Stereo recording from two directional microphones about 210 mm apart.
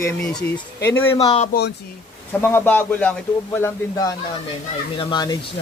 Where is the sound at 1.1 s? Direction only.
25° left (ahead or behind).